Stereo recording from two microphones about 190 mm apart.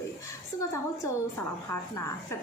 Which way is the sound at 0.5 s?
15° left (ahead or behind).